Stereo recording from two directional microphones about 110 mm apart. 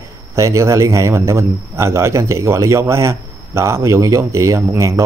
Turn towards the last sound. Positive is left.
turn(degrees=-25)  # may be behind; listen again after turning